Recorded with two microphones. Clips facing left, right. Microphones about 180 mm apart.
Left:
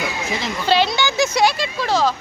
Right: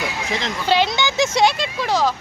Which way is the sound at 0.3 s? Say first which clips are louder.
Even; 5° left (ahead or behind).